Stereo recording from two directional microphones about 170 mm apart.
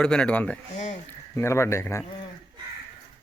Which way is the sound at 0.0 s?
5° left (ahead or behind).